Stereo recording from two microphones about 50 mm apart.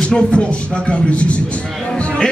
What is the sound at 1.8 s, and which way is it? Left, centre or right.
Music, left.